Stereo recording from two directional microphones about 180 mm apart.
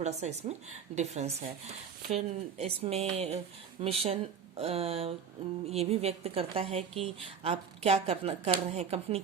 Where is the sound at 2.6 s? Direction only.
35° right (ahead or behind).